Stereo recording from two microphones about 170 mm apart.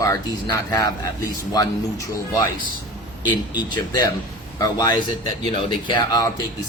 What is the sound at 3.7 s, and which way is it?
Speech, 25° left (ahead or behind).